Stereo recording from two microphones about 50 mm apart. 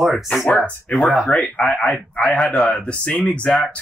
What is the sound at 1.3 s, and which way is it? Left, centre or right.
A man's voice, centre.